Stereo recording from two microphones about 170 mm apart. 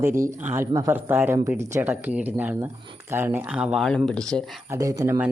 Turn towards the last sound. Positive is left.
turn(degrees=-20)  # may be behind; listen again after turning